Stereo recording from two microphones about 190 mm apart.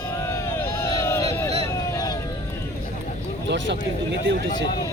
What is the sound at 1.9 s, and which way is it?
Vehicle, 20° left (ahead or behind).